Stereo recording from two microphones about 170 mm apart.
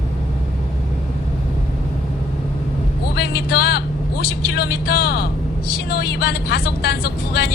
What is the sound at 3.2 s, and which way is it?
Speech, 75° left (ahead or behind).